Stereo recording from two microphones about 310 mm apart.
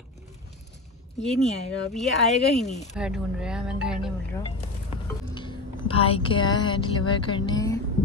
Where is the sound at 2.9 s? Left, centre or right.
Centre.